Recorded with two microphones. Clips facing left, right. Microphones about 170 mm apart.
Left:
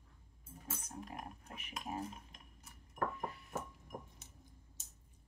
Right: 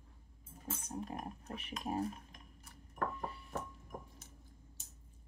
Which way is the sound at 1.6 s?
35° right (ahead or behind).